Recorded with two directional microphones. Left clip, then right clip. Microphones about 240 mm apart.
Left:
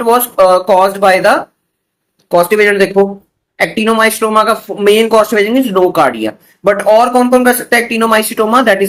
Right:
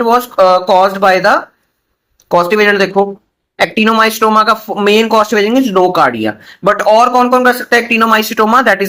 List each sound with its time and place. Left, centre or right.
0.3 s speech: right